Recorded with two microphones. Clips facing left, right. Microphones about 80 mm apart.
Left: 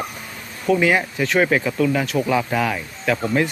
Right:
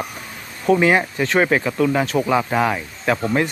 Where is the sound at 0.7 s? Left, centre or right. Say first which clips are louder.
Right 2 dB; right.